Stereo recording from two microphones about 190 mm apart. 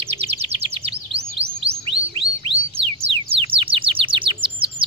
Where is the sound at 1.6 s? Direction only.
30° right (ahead or behind).